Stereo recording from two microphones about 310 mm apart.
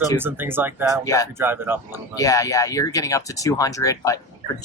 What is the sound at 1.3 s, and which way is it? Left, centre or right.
Speech, centre.